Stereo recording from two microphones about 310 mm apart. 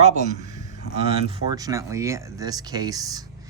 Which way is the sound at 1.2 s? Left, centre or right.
Centre.